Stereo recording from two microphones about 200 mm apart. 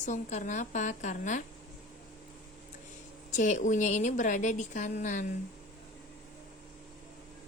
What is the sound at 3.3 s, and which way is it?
Speech, 35° left (ahead or behind).